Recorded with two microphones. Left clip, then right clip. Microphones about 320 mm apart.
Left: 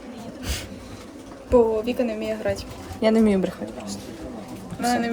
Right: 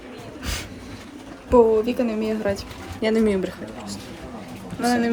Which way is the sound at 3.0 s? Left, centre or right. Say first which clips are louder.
Left 1 dB; centre.